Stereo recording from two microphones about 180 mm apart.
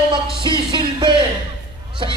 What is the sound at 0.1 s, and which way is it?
Music, 25° right (ahead or behind).